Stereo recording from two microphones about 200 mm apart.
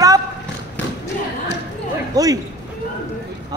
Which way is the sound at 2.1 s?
20° right (ahead or behind).